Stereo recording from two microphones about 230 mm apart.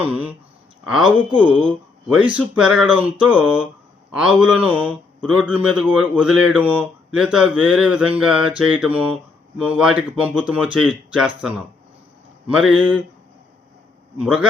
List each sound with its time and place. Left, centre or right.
0.0 s speech: centre
2.1 s speech: centre
14.2 s speech: centre